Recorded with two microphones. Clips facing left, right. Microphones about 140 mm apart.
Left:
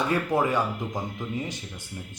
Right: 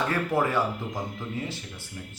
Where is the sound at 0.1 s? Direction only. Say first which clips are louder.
Left 1 dB; 15° left (ahead or behind).